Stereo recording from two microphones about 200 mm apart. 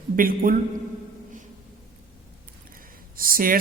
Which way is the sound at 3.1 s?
45° right (ahead or behind).